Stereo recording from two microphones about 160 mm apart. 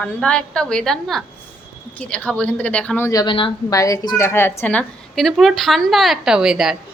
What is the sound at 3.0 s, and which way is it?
Speech, 20° left (ahead or behind).